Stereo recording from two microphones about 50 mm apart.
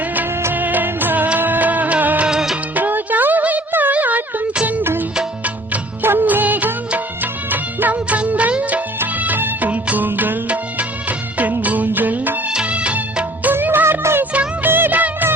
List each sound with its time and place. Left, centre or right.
0.5 s music: right
1.4 s music of bollywood: right
2.2 s music of bollywood: centre
2.7 s music: right
3.7 s a sound: right
4.8 s music: right
7.5 s music of bollywood: right
8.3 s music: right
11.6 s music: right
12.5 s music of bollywood: right
13.4 s music of bollywood: right